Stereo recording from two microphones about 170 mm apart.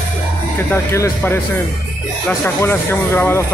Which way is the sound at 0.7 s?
15° left (ahead or behind).